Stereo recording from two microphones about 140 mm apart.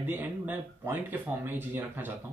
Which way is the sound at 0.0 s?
15° right (ahead or behind).